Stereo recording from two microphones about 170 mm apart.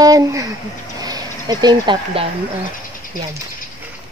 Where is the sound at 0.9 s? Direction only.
25° right (ahead or behind).